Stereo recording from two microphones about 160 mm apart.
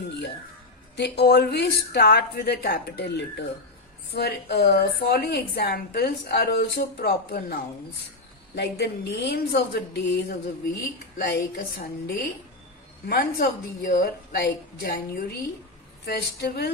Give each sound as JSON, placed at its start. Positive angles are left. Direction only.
{"t": 0.9, "sound": "a woman's voice", "side_deg": 90}
{"t": 8.5, "sound": "speech", "side_deg": 90}
{"t": 13.1, "sound": "a woman's voice", "side_deg": 80}
{"t": 16.0, "sound": "speech", "side_deg": 90}